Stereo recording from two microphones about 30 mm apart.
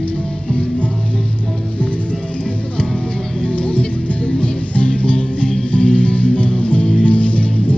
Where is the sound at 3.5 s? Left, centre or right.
Left.